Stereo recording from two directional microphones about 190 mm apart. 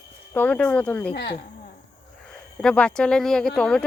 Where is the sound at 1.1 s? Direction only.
60° left (ahead or behind).